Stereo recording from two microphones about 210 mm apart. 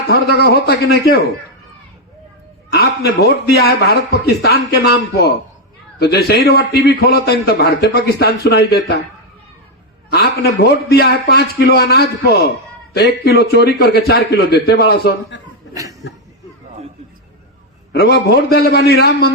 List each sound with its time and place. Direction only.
0.1 s a man's voice: 50° left (ahead or behind)
2.7 s a man's voice: 50° left (ahead or behind)
10.1 s a man's voice: 50° left (ahead or behind)
15.7 s chuckle: 15° right (ahead or behind)
17.9 s a man's voice: 50° left (ahead or behind)